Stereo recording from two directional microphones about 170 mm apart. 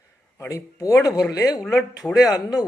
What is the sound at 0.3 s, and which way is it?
Speech, 20° left (ahead or behind).